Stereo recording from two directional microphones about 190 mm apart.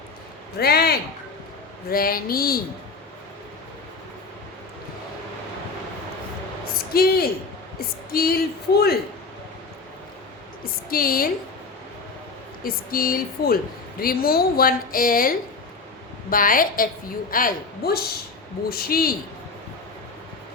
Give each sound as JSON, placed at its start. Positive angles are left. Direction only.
{"t": 0.6, "sound": "speech", "side_deg": 55}
{"t": 6.9, "sound": "speech", "side_deg": 50}
{"t": 10.6, "sound": "speech", "side_deg": 50}
{"t": 12.6, "sound": "speech", "side_deg": 50}